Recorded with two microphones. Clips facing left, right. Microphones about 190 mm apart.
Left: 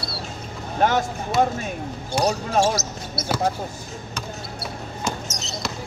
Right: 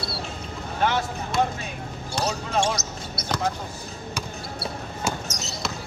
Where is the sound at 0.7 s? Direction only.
45° left (ahead or behind).